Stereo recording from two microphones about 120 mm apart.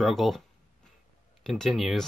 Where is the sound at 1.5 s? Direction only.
Centre (ahead or behind).